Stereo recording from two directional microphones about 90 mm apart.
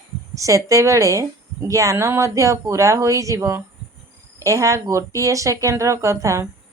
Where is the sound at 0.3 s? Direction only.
35° right (ahead or behind).